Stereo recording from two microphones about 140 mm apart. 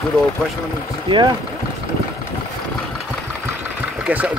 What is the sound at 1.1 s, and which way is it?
Speech, 30° right (ahead or behind).